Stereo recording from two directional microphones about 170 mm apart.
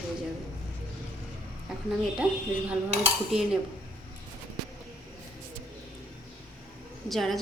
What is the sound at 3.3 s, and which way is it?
Speech, 5° right (ahead or behind).